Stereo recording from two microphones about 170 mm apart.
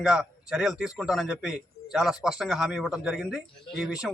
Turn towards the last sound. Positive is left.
turn(degrees=0)  # may be behind; listen again after turning